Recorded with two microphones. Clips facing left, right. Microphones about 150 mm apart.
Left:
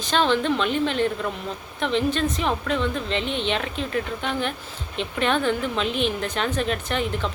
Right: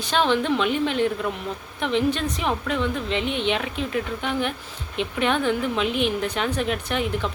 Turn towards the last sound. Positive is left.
turn(degrees=-10)  # may be behind; listen again after turning